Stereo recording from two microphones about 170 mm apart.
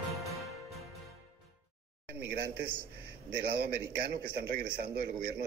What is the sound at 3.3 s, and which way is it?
A man's voice, 65° right (ahead or behind).